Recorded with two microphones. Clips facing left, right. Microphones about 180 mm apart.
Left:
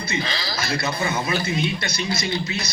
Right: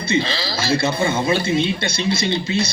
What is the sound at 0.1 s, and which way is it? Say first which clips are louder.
A man's voice: right 9 dB; 30° right (ahead or behind).